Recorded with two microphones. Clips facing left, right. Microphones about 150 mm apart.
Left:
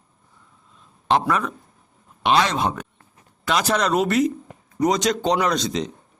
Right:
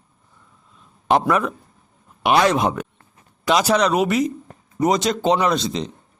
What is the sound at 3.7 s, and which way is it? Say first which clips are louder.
A man's voice: left 1 dB; centre (ahead or behind).